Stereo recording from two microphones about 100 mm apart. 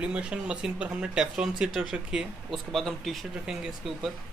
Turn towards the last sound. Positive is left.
turn(degrees=-5)  # may be behind; listen again after turning